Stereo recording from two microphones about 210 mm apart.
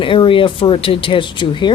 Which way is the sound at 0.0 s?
25° left (ahead or behind).